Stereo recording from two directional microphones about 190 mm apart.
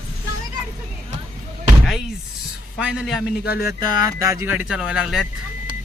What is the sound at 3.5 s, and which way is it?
Speech, 55° left (ahead or behind).